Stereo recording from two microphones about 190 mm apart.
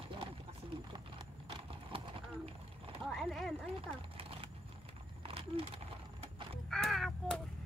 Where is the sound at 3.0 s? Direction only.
Centre (ahead or behind).